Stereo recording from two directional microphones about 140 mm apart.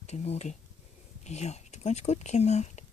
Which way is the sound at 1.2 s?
50° left (ahead or behind).